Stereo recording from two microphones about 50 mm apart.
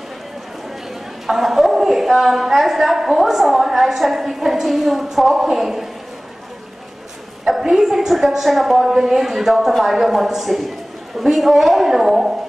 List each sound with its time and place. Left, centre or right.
1.2 s a woman's voice: centre
7.4 s a woman's voice: centre
11.1 s a sound: centre